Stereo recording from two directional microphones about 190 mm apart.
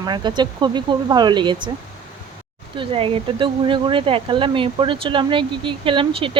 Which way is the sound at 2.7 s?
30° right (ahead or behind).